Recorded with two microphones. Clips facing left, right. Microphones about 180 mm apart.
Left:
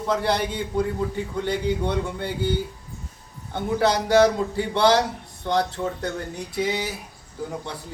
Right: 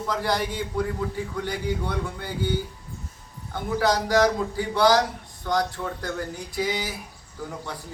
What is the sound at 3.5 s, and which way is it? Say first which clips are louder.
A man's voice: left 2 dB; 25° left (ahead or behind).